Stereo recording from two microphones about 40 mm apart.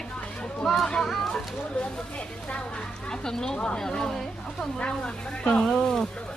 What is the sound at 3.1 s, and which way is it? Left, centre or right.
A woman's voice, centre.